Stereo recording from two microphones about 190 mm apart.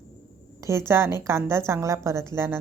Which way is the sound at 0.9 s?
15° right (ahead or behind).